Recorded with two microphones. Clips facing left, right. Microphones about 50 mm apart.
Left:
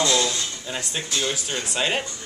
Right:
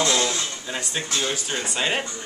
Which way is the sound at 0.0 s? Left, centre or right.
Right.